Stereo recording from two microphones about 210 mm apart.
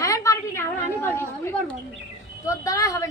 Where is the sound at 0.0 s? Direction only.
15° left (ahead or behind).